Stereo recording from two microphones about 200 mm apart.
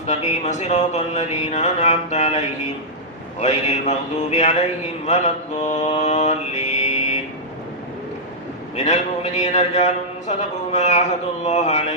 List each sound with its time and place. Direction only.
0.1 s a man's voice: 35° left (ahead or behind)
3.4 s a man's voice: 30° left (ahead or behind)
8.7 s a man's voice: 35° left (ahead or behind)